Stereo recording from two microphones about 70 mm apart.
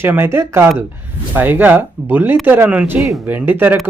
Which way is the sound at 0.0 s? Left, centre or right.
Right.